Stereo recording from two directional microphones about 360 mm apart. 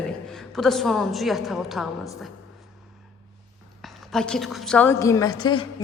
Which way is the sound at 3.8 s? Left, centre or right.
Centre.